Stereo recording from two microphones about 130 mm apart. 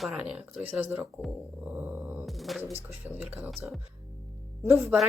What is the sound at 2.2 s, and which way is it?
Music, centre (ahead or behind).